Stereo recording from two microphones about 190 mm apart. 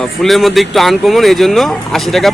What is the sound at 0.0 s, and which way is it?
Speech, centre (ahead or behind).